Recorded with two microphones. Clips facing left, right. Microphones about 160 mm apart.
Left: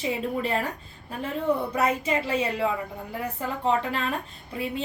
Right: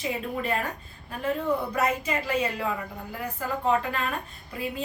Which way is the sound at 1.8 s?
25° left (ahead or behind).